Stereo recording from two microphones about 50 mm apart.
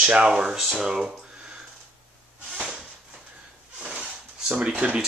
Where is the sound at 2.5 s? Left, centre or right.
Centre.